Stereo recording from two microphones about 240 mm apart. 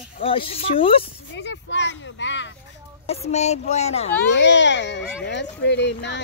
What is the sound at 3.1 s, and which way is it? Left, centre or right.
Speech, left.